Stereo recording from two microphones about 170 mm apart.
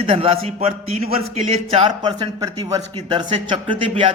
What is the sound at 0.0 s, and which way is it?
Speech, 35° right (ahead or behind).